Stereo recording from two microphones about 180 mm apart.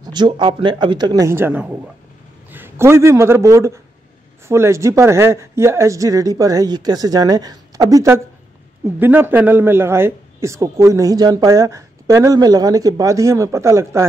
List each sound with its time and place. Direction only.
0.0 s a man's voice: 25° right (ahead or behind)